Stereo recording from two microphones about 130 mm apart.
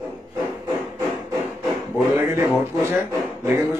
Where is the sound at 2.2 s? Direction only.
20° right (ahead or behind).